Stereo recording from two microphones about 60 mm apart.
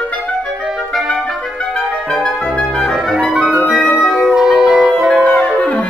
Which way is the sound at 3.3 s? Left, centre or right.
Centre.